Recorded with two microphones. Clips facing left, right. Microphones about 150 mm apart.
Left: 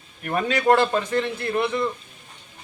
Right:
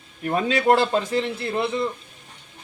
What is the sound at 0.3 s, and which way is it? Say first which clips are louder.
Speech: even; 25° right (ahead or behind).